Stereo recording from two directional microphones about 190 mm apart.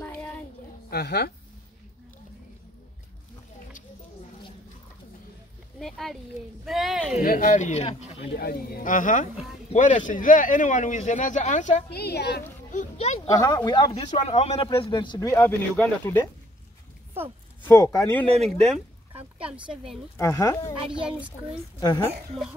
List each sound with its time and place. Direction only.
0.0 s child singing: 10° left (ahead or behind)
0.8 s a woman's voice: 55° left (ahead or behind)
5.8 s speech: centre (ahead or behind)
7.2 s speech: 45° left (ahead or behind)
8.2 s speech: 55° left (ahead or behind); by 11.8 s 40° left (ahead or behind)
11.9 s a woman's voice: 60° left (ahead or behind)
12.7 s speech: 40° left (ahead or behind)
13.3 s speech: 15° left (ahead or behind)
17.6 s a woman's voice: 15° left (ahead or behind); by 19.8 s 5° right (ahead or behind)
20.2 s speech: 15° left (ahead or behind)
20.9 s speech: 5° right (ahead or behind)